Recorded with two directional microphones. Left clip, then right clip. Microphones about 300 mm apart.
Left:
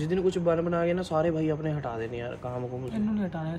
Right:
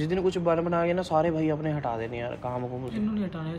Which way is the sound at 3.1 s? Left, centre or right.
Centre.